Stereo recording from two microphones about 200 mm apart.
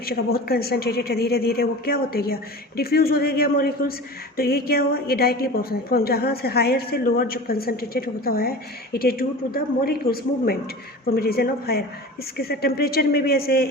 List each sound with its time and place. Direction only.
0.0 s a woman's voice: 50° left (ahead or behind)